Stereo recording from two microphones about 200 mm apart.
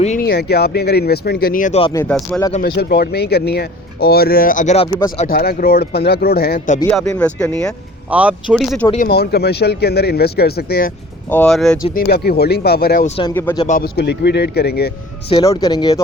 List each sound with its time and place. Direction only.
0.2 s speech: 55° left (ahead or behind)
1.9 s speech: 15° left (ahead or behind)
2.6 s speech: 55° left (ahead or behind); by 5.3 s 30° left (ahead or behind)
5.3 s speech: 45° left (ahead or behind)
7.0 s speech: 10° left (ahead or behind)
8.1 s speech: 5° right (ahead or behind)
9.0 s speech: 55° left (ahead or behind)
11.3 s speech: 5° left (ahead or behind)
11.8 s speech: 50° left (ahead or behind)
13.3 s speech: 10° left (ahead or behind)
13.7 s speech: 45° left (ahead or behind)
15.3 s speech: 20° left (ahead or behind)